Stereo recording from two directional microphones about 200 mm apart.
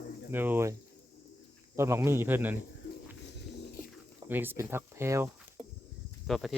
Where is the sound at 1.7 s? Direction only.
15° right (ahead or behind).